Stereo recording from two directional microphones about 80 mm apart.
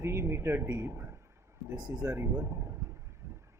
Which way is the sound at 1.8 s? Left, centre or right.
Right.